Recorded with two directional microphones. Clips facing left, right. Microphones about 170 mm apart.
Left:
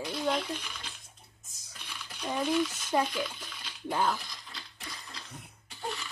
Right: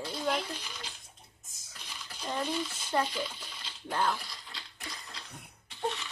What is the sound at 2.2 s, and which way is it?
Speech, 10° left (ahead or behind).